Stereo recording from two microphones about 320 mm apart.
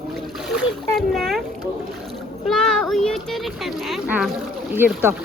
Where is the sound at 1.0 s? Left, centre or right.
Centre.